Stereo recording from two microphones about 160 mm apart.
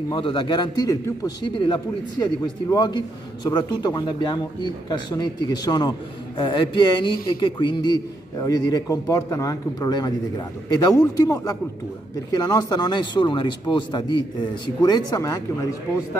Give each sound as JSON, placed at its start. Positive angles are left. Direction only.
{"t": 0.1, "sound": "a man's voice", "side_deg": 30}